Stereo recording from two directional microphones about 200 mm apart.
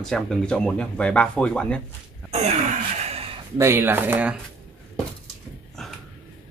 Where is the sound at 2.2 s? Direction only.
35° right (ahead or behind).